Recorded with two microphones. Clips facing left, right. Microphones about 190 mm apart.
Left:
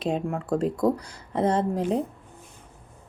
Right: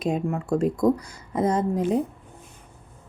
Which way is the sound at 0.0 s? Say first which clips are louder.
Right 2 dB; 10° right (ahead or behind).